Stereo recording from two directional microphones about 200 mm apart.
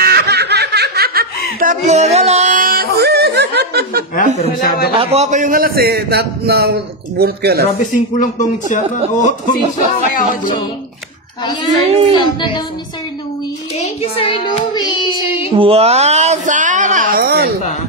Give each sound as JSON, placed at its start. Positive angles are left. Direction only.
{"t": 0.0, "sound": "snicker", "side_deg": -55}
{"t": 1.6, "sound": "yodeling", "side_deg": -35}
{"t": 4.4, "sound": "speech", "side_deg": 45}
{"t": 4.9, "sound": "a man's voice", "side_deg": -35}
{"t": 7.8, "sound": "speech", "side_deg": 40}
{"t": 11.8, "sound": "a child's voice", "side_deg": -30}
{"t": 12.2, "sound": "child singing", "side_deg": 20}
{"t": 13.7, "sound": "child singing", "side_deg": 30}
{"t": 15.5, "sound": "a sound", "side_deg": -30}